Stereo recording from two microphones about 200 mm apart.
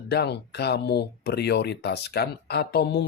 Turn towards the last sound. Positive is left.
turn(degrees=55)  # may be behind; listen again after turning